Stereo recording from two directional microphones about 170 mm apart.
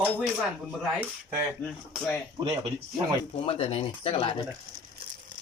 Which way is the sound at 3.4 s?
30° left (ahead or behind).